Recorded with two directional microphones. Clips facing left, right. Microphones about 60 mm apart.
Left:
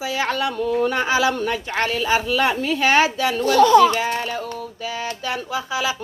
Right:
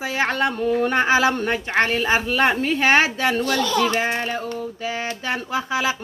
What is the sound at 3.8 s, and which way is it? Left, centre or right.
Speech, right.